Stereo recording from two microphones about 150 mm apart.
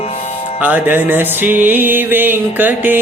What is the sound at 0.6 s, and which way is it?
Music, 10° right (ahead or behind).